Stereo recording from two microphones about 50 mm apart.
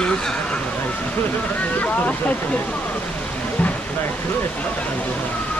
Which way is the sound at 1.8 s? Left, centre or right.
Left.